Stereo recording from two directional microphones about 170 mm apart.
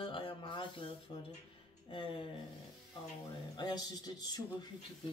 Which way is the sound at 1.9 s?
30° left (ahead or behind).